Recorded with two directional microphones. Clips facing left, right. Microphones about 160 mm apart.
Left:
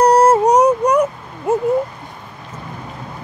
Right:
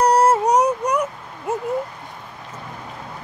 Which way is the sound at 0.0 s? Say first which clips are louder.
Left 5 dB; 50° left (ahead or behind).